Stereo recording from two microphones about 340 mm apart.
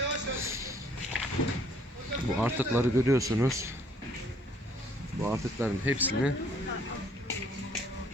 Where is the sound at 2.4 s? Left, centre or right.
Centre.